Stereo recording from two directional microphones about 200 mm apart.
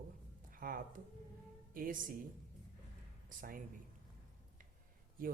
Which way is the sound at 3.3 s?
45° right (ahead or behind).